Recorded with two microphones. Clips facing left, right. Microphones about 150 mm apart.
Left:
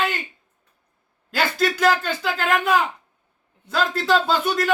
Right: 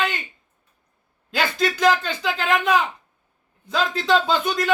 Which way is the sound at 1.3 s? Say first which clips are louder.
Left 1 dB; 5° left (ahead or behind).